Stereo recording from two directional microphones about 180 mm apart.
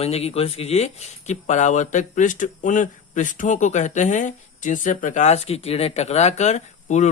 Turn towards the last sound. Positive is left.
turn(degrees=40)  # may be behind; listen again after turning